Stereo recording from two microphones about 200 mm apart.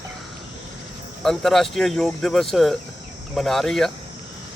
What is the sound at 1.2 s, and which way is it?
Speech, centre (ahead or behind).